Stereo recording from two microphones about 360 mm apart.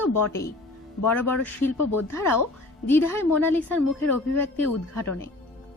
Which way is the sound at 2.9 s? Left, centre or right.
Centre.